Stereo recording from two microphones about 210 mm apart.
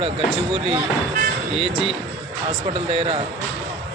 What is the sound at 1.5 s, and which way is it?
Speech, 25° right (ahead or behind).